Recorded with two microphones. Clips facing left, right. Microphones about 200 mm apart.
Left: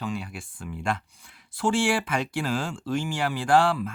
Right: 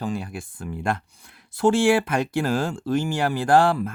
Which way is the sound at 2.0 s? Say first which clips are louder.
Right 5 dB; 45° right (ahead or behind).